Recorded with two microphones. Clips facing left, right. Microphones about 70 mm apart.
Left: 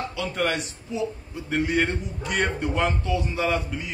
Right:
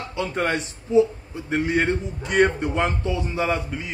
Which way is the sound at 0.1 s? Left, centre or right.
Right.